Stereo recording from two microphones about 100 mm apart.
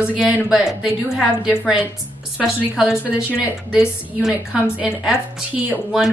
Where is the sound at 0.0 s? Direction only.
10° right (ahead or behind).